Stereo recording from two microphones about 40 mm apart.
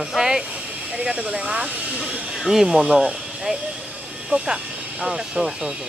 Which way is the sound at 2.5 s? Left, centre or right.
Centre.